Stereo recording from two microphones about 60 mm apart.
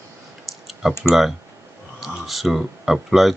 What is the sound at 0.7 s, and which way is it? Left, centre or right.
Typing, centre.